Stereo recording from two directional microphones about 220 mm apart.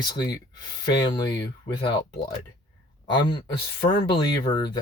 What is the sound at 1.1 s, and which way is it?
Speech, 20° left (ahead or behind).